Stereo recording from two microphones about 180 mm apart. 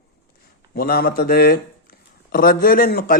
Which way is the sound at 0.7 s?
55° left (ahead or behind).